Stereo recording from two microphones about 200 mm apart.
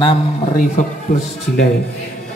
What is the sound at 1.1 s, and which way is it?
Speech, 45° left (ahead or behind).